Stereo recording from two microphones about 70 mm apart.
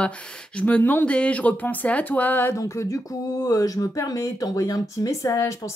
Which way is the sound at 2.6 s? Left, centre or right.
Left.